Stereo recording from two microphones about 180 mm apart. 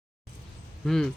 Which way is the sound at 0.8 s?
Centre (ahead or behind).